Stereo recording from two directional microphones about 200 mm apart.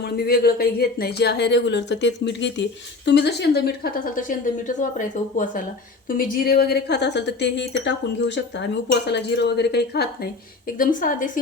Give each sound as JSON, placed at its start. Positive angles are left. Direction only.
{"t": 0.0, "sound": "speech", "side_deg": 50}
{"t": 9.0, "sound": "speech", "side_deg": 60}
{"t": 10.8, "sound": "speech", "side_deg": 45}